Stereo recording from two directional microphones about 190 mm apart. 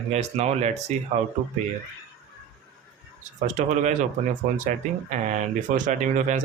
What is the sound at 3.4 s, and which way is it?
Speech, 40° right (ahead or behind).